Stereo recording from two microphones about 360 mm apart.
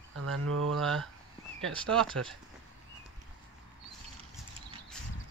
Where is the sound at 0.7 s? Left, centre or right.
Centre.